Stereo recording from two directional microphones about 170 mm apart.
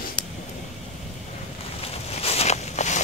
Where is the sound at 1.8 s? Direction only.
35° left (ahead or behind).